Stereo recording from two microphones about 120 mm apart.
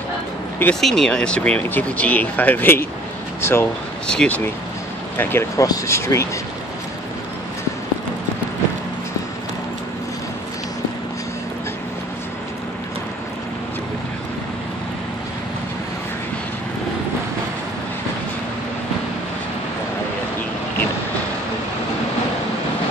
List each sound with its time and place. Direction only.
0.7 s speech: 5° left (ahead or behind); by 3.6 s 20° left (ahead or behind)
4.1 s speech: 5° left (ahead or behind)
5.1 s speech: 20° left (ahead or behind)